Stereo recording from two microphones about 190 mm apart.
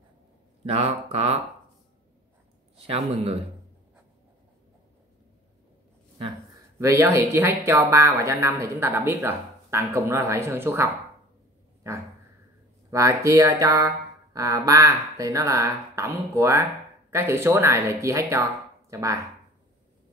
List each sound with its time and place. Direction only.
0.7 s speech: 30° right (ahead or behind)
6.8 s speech: 15° right (ahead or behind)
12.9 s speech: 15° right (ahead or behind)